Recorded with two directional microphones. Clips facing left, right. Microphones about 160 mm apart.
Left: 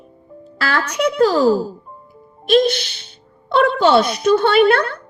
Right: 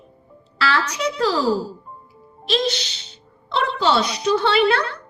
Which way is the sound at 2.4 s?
55° left (ahead or behind).